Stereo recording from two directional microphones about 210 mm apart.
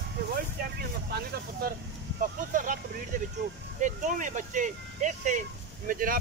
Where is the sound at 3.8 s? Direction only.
35° right (ahead or behind).